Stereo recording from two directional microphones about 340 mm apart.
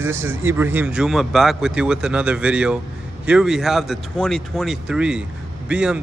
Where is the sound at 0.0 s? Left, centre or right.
Centre.